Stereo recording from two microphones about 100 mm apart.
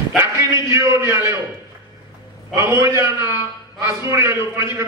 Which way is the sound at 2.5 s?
25° right (ahead or behind).